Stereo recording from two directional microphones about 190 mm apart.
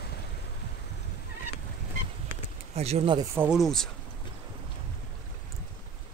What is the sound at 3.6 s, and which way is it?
Speech, centre (ahead or behind).